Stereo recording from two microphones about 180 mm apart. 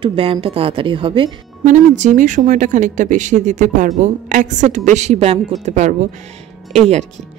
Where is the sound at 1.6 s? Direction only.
40° right (ahead or behind).